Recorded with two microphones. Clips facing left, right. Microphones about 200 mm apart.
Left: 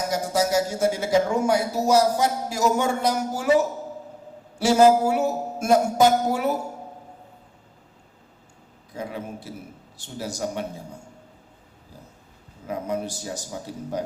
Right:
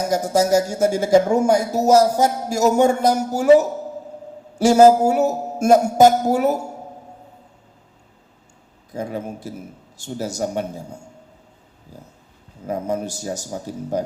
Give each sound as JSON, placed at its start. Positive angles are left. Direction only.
{"t": 0.1, "sound": "speech", "side_deg": -45}
{"t": 9.0, "sound": "speech", "side_deg": -45}
{"t": 12.6, "sound": "speech", "side_deg": -45}